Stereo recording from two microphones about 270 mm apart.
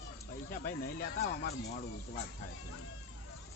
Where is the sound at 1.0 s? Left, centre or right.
Left.